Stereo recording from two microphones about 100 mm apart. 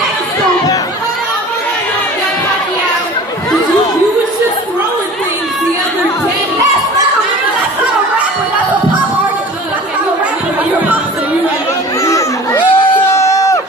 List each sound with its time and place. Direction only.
12.0 s chatter: 30° left (ahead or behind)
12.5 s crowd: 25° left (ahead or behind)